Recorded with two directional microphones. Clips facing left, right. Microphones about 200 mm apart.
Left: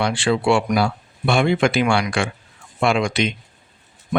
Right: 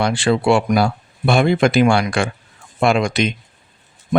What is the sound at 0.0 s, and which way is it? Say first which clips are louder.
Speech: right 2 dB; 40° right (ahead or behind).